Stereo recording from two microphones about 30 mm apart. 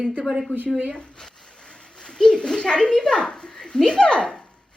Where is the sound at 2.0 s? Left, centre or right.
Left.